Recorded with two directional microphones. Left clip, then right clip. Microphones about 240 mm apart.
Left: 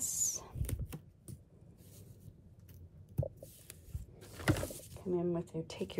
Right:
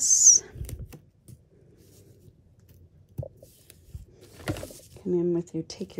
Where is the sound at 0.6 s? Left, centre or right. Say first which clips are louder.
Right 2 dB; centre.